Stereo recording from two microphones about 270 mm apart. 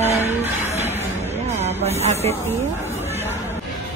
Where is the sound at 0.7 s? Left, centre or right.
Right.